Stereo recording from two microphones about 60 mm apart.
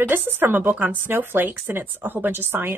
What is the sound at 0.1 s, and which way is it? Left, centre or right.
A woman's voice, right.